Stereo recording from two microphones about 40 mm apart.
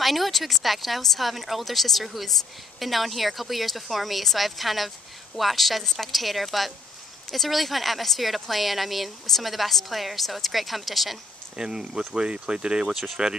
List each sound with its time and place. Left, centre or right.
0.0 s speech: centre
11.5 s speech: centre
12.9 s speech: centre